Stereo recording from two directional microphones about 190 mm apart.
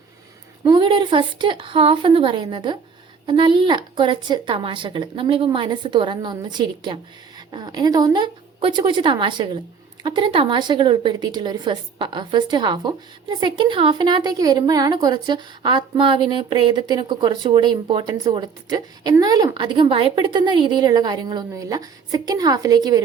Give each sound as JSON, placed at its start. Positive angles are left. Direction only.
{"t": 0.6, "sound": "a woman's voice", "side_deg": -25}